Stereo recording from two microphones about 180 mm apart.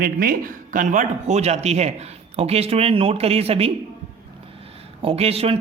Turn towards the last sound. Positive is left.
turn(degrees=-35)  # may be behind; listen again after turning